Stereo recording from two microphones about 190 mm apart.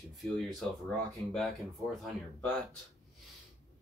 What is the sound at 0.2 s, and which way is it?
Speech, centre (ahead or behind).